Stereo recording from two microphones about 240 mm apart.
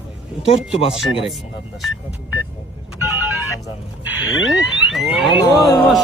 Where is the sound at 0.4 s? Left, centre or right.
Left.